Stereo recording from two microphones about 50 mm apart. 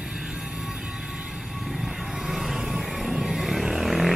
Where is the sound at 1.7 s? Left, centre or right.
Centre.